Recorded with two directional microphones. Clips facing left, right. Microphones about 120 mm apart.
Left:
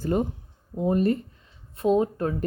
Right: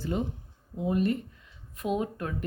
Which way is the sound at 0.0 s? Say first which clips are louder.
Left 6 dB; 50° left (ahead or behind).